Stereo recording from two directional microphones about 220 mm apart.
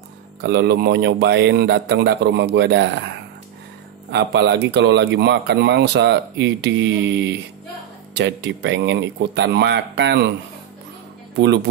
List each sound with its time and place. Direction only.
0.4 s speech: 50° right (ahead or behind)
4.1 s speech: 50° right (ahead or behind)
11.3 s speech: 50° right (ahead or behind)